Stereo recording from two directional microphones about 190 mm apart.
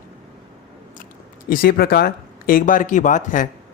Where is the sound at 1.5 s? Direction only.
50° left (ahead or behind).